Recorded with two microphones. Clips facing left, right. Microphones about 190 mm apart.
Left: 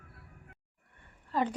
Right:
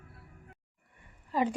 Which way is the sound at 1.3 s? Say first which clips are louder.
Right 1 dB; 5° right (ahead or behind).